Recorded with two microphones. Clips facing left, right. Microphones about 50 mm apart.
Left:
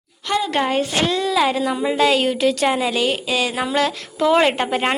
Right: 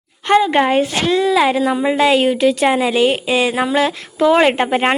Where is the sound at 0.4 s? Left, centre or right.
Right.